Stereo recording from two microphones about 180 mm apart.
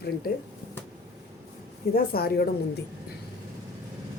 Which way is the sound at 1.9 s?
60° left (ahead or behind).